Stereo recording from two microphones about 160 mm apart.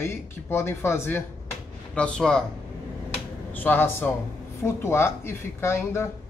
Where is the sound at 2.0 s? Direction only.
5° left (ahead or behind).